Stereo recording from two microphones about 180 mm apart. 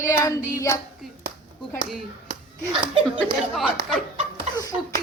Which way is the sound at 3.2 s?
Centre (ahead or behind).